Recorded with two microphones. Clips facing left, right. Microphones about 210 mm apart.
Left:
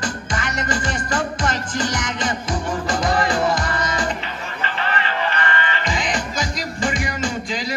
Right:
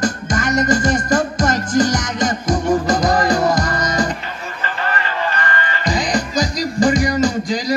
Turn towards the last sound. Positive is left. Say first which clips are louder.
# right 8 dB
turn(degrees=-40)  # may be behind; listen again after turning